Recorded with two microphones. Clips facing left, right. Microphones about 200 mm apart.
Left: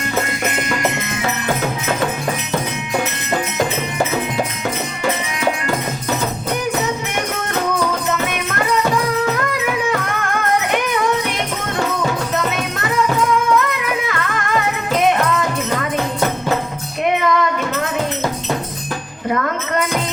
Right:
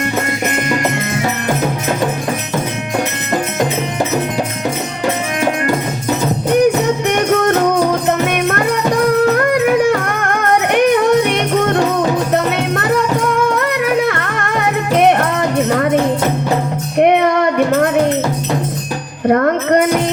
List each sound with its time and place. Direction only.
9.3 s music: 65° right (ahead or behind)
17.0 s music: 60° right (ahead or behind)
19.3 s music: 55° right (ahead or behind)